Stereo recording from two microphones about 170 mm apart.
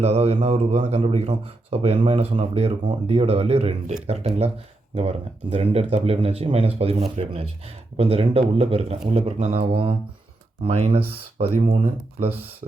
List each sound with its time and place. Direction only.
0.0 s speech: 40° right (ahead or behind)
12.3 s speech: 10° right (ahead or behind)